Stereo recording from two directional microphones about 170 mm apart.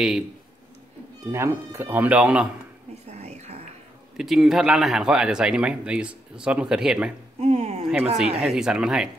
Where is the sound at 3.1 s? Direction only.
40° right (ahead or behind).